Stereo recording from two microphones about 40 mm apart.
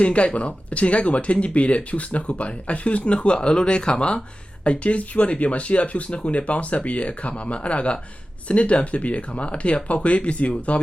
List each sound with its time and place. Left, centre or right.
0.0 s speech: left